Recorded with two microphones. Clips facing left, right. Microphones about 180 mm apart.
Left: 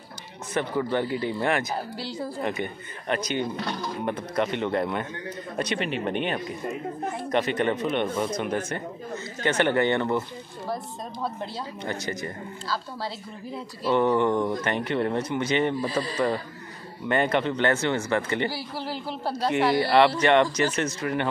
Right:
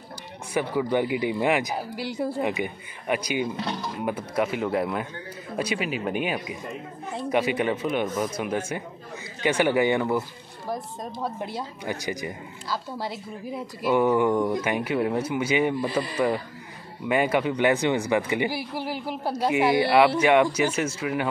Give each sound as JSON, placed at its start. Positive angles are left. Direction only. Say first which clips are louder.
{"t": 0.6, "sound": "a woman's voice", "louder": "right 2 dB", "side_deg": -10}
{"t": 11.2, "sound": "a woman's voice", "louder": "right 1 dB", "side_deg": -15}
{"t": 15.8, "sound": "a man's voice", "louder": "right 1 dB", "side_deg": -20}
{"t": 17.1, "sound": "a woman's voice", "louder": "right 1 dB", "side_deg": -10}